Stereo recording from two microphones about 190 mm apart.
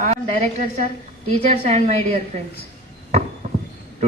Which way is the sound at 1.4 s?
35° right (ahead or behind).